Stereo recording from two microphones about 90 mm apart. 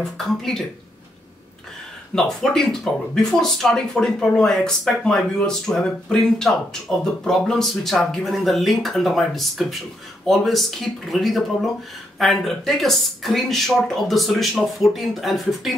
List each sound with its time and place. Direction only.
0.3 s speech: 5° left (ahead or behind)
2.1 s speech: 5° left (ahead or behind)